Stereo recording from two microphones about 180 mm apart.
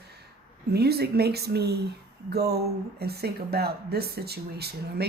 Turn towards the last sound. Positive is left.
turn(degrees=-65)  # may be behind; listen again after turning